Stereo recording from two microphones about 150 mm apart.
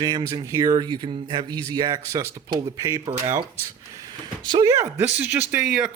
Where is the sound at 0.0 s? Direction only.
25° right (ahead or behind).